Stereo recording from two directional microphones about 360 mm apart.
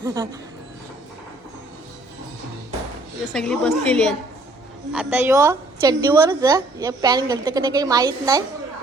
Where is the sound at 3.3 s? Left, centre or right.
Centre.